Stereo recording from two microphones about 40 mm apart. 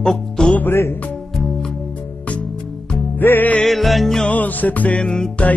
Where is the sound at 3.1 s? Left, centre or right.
Left.